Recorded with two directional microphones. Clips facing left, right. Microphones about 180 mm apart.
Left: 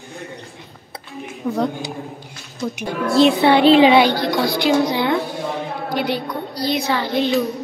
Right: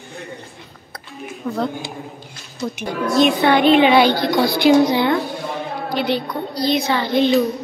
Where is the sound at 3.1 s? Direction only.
30° left (ahead or behind).